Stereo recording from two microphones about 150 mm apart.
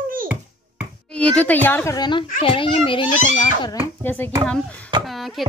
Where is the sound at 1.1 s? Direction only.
10° left (ahead or behind); by 3.1 s 35° left (ahead or behind).